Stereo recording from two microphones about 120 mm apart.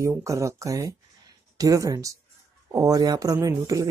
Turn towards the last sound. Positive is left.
turn(degrees=-30)  # may be behind; listen again after turning